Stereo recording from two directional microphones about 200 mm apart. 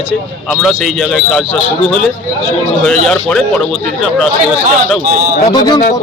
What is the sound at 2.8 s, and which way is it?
Speech, 5° left (ahead or behind).